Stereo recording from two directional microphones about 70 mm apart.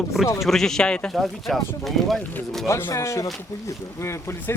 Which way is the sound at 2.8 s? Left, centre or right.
Left.